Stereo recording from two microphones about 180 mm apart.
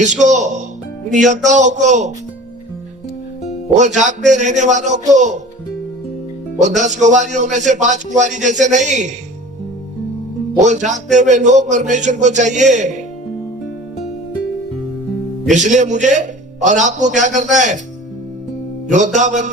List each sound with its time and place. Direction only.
0.0 s a man's voice: 40° right (ahead or behind)
3.8 s a man's voice: 40° right (ahead or behind)
6.6 s a man's voice: 40° right (ahead or behind)
10.5 s a man's voice: 45° right (ahead or behind)
15.4 s a man's voice: 40° right (ahead or behind)
18.9 s a man's voice: 40° right (ahead or behind)